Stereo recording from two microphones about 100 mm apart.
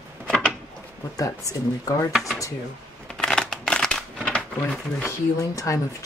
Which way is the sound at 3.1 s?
5° left (ahead or behind).